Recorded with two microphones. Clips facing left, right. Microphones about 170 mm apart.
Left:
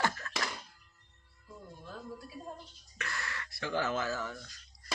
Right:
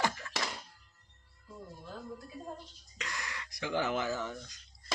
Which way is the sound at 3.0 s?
15° right (ahead or behind).